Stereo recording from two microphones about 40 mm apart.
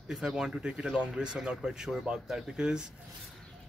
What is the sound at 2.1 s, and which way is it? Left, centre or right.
Speech, right.